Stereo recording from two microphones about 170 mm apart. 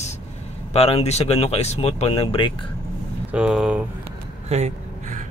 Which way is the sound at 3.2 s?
5° right (ahead or behind).